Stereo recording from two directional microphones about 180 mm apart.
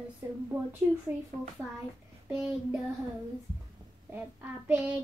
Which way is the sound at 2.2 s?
5° right (ahead or behind).